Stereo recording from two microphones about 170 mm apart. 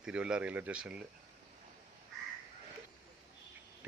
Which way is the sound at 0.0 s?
5° right (ahead or behind).